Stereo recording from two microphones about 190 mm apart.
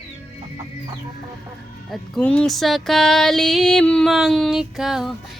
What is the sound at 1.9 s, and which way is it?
A woman's voice, 5° left (ahead or behind).